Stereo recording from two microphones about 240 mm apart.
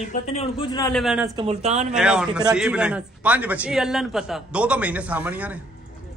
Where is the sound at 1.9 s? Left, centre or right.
Centre.